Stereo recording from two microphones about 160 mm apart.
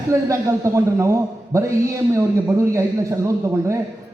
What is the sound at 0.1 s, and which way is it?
A man's voice, 20° right (ahead or behind).